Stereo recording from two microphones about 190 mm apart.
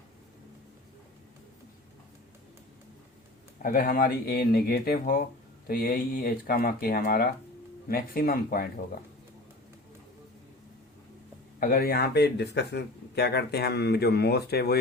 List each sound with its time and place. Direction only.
3.6 s speech: 50° left (ahead or behind)
11.6 s speech: 50° left (ahead or behind)